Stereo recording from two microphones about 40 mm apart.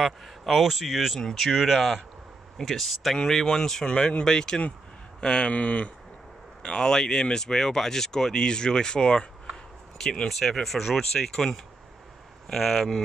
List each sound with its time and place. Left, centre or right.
0.0 s speech: centre
1.2 s speech: centre
1.5 s speech: centre
3.8 s speech: left
6.6 s speech: centre
9.5 s a sound: centre
10.2 s speech: centre